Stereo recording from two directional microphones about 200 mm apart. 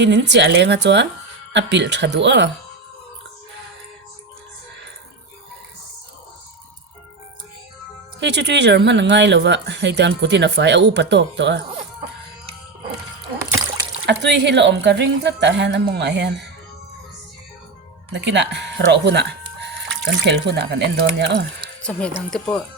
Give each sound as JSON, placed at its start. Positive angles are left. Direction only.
{"t": 0.0, "sound": "speech", "side_deg": -60}
{"t": 8.2, "sound": "speech", "side_deg": -60}
{"t": 14.1, "sound": "speech", "side_deg": -60}
{"t": 18.1, "sound": "speech", "side_deg": -60}
{"t": 21.8, "sound": "speech", "side_deg": 5}